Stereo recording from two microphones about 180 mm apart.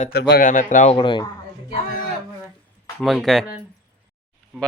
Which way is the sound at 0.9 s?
25° left (ahead or behind).